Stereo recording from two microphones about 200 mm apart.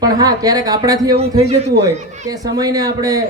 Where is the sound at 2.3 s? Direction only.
20° right (ahead or behind).